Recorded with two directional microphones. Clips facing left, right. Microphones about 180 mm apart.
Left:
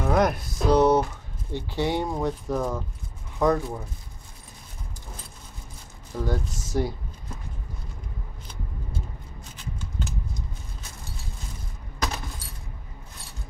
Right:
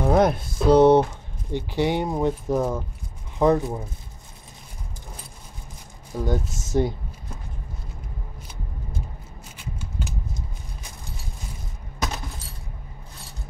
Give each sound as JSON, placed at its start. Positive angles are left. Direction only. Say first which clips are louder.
{"t": 0.0, "sound": "speech", "louder": "right 3 dB", "side_deg": -30}
{"t": 1.5, "sound": "speech", "louder": "right 3 dB", "side_deg": -15}
{"t": 6.1, "sound": "speech", "louder": "right 3 dB", "side_deg": -20}
{"t": 9.6, "sound": "scissors", "louder": "right 1 dB", "side_deg": -10}